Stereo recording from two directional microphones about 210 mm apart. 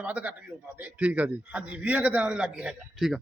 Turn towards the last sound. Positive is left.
turn(degrees=-5)  # may be behind; listen again after turning